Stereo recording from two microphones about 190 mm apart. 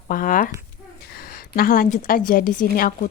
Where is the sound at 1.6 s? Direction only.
50° left (ahead or behind).